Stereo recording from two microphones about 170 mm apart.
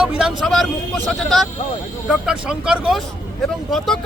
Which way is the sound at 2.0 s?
5° right (ahead or behind).